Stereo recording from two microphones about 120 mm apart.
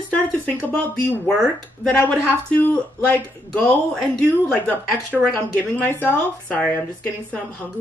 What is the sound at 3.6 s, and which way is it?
Mantra, 5° left (ahead or behind).